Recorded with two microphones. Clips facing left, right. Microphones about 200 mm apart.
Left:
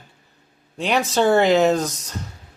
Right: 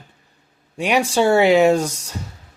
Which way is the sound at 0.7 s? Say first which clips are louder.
Right 2 dB; 10° right (ahead or behind).